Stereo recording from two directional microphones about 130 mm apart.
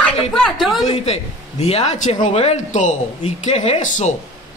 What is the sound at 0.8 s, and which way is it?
A woman's voice, 55° left (ahead or behind).